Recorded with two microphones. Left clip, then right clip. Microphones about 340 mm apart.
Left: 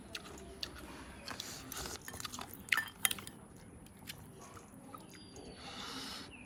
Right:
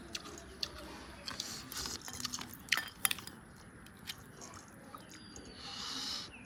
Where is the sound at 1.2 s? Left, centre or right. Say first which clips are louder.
Right 3 dB; centre.